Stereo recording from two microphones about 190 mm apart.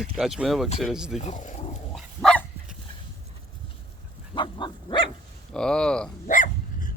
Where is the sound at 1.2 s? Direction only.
40° left (ahead or behind).